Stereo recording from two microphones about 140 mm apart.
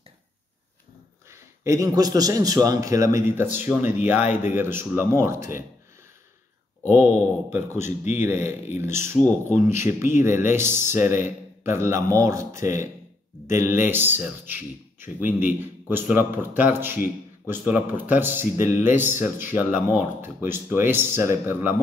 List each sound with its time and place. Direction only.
1.3 s a man's voice: 20° right (ahead or behind)
6.8 s a man's voice: 15° right (ahead or behind)